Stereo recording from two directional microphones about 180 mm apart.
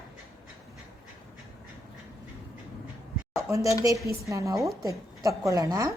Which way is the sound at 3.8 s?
20° right (ahead or behind).